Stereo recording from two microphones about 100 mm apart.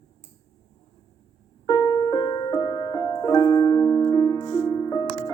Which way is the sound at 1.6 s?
35° left (ahead or behind).